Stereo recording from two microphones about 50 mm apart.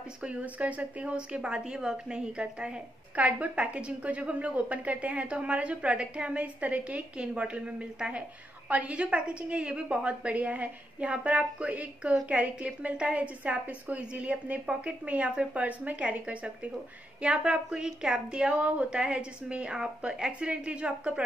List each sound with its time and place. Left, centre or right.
0.2 s speech: right
10.3 s speech: right